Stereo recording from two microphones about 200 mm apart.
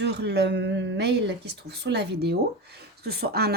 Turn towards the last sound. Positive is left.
turn(degrees=-50)  # may be behind; listen again after turning